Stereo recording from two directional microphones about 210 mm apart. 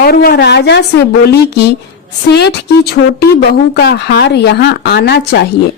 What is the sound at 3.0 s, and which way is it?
A woman's voice, 55° left (ahead or behind).